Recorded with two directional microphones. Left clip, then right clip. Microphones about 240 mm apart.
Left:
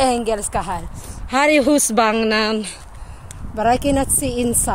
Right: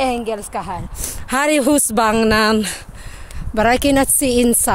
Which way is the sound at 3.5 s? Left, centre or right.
Right.